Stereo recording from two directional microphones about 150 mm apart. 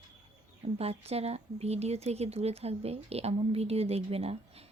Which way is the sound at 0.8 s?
45° right (ahead or behind).